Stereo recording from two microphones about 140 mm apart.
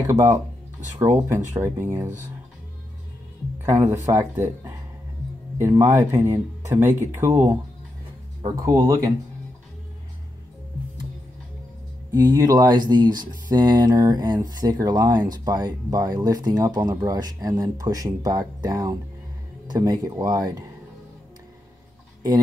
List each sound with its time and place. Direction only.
0.1 s speech: 25° right (ahead or behind)
3.6 s speech: 20° right (ahead or behind)
8.5 s speech: 25° right (ahead or behind)
12.1 s speech: 25° right (ahead or behind)